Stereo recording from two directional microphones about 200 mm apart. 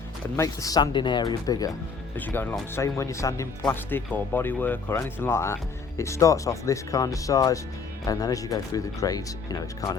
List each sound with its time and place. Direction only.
0.3 s speech: 15° left (ahead or behind)